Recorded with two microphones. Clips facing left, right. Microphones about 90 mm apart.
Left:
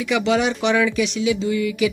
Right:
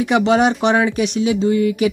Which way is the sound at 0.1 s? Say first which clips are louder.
Right 4 dB; 45° right (ahead or behind).